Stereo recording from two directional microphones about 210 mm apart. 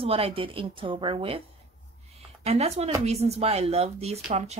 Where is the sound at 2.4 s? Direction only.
30° right (ahead or behind).